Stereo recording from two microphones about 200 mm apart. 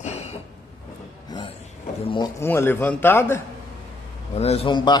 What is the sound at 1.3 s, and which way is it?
Train, 20° left (ahead or behind).